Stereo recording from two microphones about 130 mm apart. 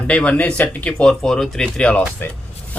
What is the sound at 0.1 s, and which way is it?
Speech, 10° left (ahead or behind).